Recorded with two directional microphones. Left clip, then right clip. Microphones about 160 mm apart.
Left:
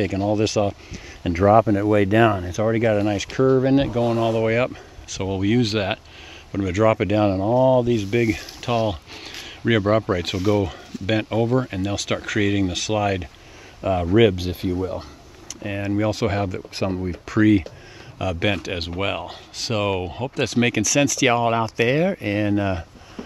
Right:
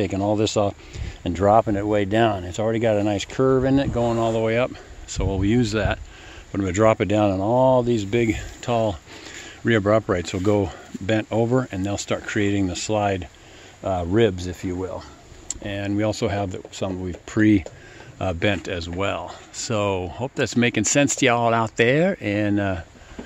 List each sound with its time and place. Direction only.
0.0 s speech: centre (ahead or behind)
1.4 s speech: 30° left (ahead or behind)
2.0 s speech: 15° left (ahead or behind)
3.4 s speech: 15° left (ahead or behind)
4.2 s speech: centre (ahead or behind)
14.4 s speech: 40° left (ahead or behind)
15.4 s speech: centre (ahead or behind); by 17.4 s 15° left (ahead or behind)
17.4 s speech: centre (ahead or behind)